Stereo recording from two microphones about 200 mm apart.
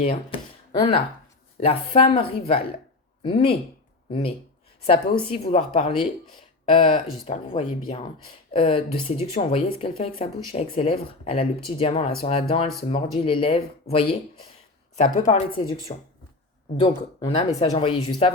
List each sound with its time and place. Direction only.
0.3 s a sound: 25° left (ahead or behind)
1.5 s speech: 30° left (ahead or behind)
3.2 s speech: 25° left (ahead or behind)
14.9 s speech: 40° left (ahead or behind)
17.2 s speech: 25° left (ahead or behind)